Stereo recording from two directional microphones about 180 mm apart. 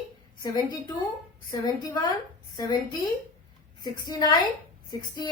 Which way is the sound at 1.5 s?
20° left (ahead or behind).